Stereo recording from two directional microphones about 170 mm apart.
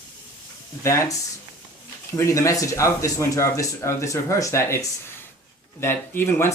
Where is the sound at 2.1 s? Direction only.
15° left (ahead or behind).